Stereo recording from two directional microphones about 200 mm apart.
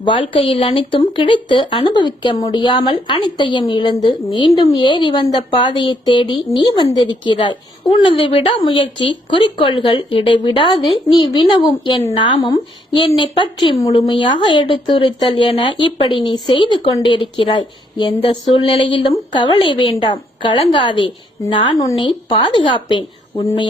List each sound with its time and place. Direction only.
0.0 s speech: 25° left (ahead or behind)